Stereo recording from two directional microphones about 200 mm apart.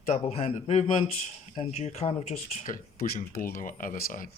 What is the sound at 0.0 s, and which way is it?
Speech, 35° left (ahead or behind).